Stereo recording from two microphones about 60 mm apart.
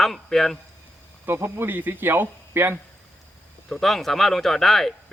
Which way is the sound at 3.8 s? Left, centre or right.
Centre.